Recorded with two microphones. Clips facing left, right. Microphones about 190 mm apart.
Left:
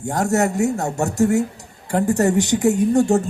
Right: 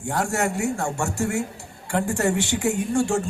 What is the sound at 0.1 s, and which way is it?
A man's voice, 40° left (ahead or behind).